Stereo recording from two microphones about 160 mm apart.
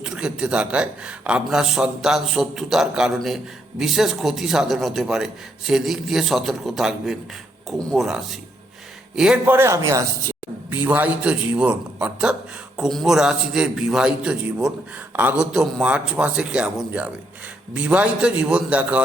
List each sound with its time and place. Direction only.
0.0 s a man's voice: 5° right (ahead or behind)